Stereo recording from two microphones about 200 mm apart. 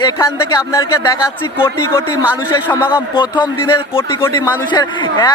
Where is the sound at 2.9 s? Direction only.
25° left (ahead or behind).